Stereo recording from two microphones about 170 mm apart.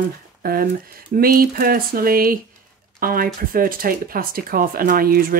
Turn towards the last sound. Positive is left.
turn(degrees=-60)  # may be behind; listen again after turning